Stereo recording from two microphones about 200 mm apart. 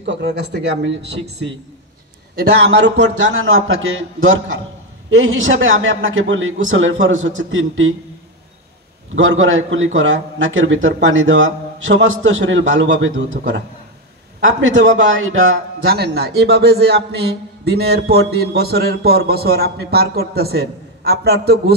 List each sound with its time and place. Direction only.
0.0 s a man's voice: 60° right (ahead or behind)
9.1 s a man's voice: 75° right (ahead or behind)
14.6 s a man's voice: 65° right (ahead or behind); by 15.5 s 85° right
15.9 s a man's voice: 55° right (ahead or behind)